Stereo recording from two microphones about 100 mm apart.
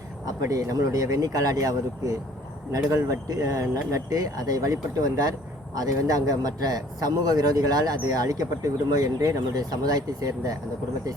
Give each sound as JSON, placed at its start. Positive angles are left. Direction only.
{"t": 0.4, "sound": "a man's voice", "side_deg": -35}